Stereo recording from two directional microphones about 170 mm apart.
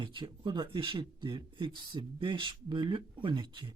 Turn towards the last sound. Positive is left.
turn(degrees=-25)  # may be behind; listen again after turning